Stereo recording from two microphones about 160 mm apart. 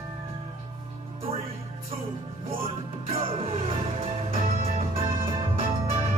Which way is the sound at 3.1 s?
35° right (ahead or behind).